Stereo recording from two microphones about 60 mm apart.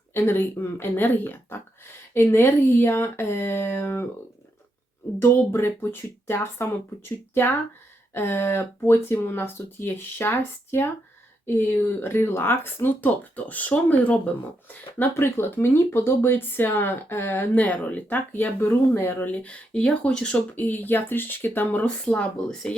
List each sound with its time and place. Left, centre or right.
0.1 s speech: left
5.5 s speech: left
8.1 s speech: left
18.6 s speech: left; by 20.3 s centre
20.3 s speech: left